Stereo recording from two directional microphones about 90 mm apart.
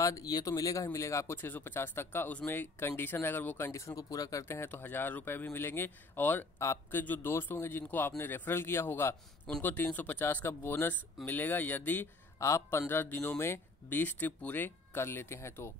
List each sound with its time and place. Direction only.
0.0 s speech: 40° left (ahead or behind); by 12.1 s 20° left (ahead or behind)
12.4 s a man's voice: 35° left (ahead or behind)
12.6 s speech: 25° left (ahead or behind)